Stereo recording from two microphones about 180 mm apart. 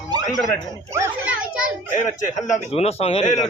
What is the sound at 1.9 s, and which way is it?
A man's voice, 45° left (ahead or behind).